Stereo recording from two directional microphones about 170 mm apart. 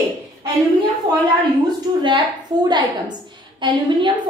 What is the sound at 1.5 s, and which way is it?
A woman's voice, 25° right (ahead or behind).